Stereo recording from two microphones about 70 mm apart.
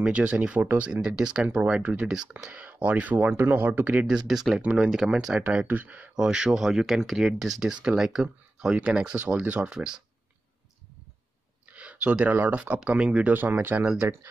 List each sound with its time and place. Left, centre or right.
0.0 s speech: centre
1.0 s speech: centre
5.4 s speech: right
6.1 s speech: centre
11.7 s speech: centre
13.4 s speech: right